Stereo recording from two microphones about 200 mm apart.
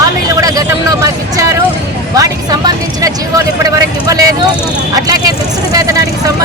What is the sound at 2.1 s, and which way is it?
Speech, 15° right (ahead or behind).